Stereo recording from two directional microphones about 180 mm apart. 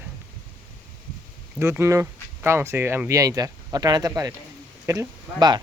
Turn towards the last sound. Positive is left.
turn(degrees=-25)  # may be behind; listen again after turning